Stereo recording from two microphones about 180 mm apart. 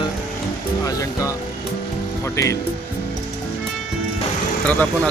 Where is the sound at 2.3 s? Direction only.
15° left (ahead or behind).